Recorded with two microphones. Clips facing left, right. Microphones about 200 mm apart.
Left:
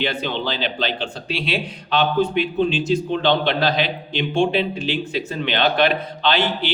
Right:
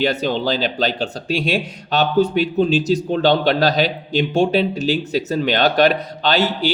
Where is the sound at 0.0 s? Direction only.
40° right (ahead or behind).